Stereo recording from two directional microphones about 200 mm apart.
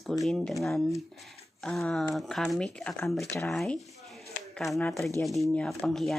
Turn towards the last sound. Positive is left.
turn(degrees=0)  # may be behind; listen again after turning